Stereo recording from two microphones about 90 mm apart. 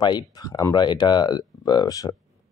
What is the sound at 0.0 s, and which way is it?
Speech, 50° left (ahead or behind).